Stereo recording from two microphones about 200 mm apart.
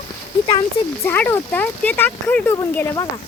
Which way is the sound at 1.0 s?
10° left (ahead or behind).